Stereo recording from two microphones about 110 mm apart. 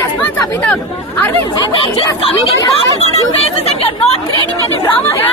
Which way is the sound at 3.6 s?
70° left (ahead or behind).